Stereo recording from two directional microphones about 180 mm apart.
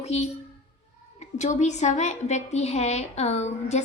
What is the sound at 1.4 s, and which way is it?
A woman's voice, 40° left (ahead or behind).